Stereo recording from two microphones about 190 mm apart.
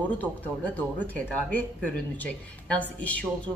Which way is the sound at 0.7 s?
10° left (ahead or behind).